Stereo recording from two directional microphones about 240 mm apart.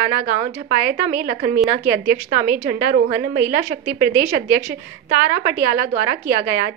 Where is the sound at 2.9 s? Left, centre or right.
Right.